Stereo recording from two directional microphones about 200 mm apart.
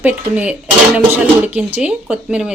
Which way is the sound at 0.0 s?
5° right (ahead or behind).